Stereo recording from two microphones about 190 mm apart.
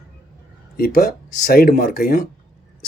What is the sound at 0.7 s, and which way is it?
Speech, 50° left (ahead or behind).